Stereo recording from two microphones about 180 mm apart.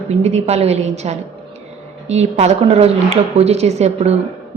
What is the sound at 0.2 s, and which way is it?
A woman's voice, 35° right (ahead or behind).